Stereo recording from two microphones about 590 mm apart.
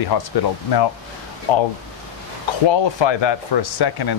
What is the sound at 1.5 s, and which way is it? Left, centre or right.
Speech, left.